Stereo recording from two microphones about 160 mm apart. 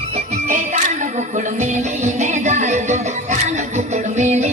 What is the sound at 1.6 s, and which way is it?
Music, 45° right (ahead or behind).